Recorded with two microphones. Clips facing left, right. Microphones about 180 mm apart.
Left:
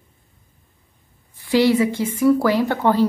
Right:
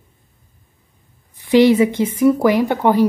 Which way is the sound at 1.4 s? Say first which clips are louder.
Right 5 dB; 20° right (ahead or behind).